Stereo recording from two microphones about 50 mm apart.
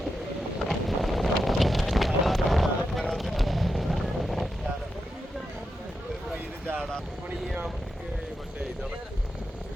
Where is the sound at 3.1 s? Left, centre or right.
Centre.